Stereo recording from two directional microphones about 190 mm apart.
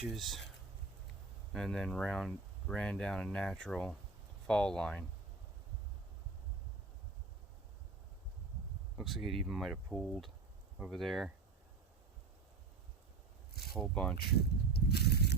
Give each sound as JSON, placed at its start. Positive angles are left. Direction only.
{"t": 0.1, "sound": "speech", "side_deg": 0}
{"t": 1.5, "sound": "speech", "side_deg": 5}
{"t": 9.0, "sound": "speech", "side_deg": 0}
{"t": 13.5, "sound": "zipper", "side_deg": 55}
{"t": 13.7, "sound": "speech", "side_deg": 5}
{"t": 14.7, "sound": "a sound", "side_deg": 60}